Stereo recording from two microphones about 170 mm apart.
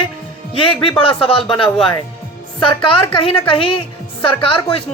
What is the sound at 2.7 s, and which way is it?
Speech, 30° left (ahead or behind).